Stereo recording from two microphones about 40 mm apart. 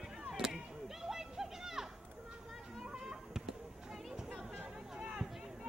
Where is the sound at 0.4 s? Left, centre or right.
Centre.